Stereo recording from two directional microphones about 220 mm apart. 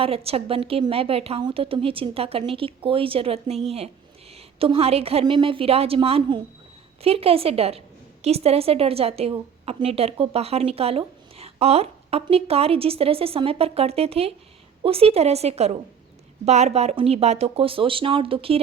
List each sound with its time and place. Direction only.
0.0 s a woman's voice: 25° right (ahead or behind)